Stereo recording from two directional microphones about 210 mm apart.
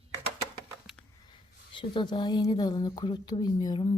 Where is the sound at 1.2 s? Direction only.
25° left (ahead or behind).